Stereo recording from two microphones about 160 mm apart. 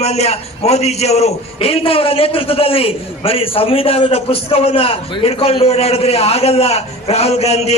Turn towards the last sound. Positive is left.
turn(degrees=40)  # may be behind; listen again after turning